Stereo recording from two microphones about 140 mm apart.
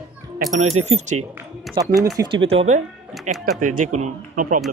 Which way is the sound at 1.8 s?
25° right (ahead or behind).